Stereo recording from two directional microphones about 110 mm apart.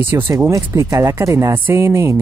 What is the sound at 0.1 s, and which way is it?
Speech, 20° right (ahead or behind).